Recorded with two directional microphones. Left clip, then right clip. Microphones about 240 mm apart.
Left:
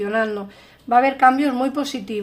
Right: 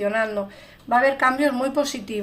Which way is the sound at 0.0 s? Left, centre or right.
Left.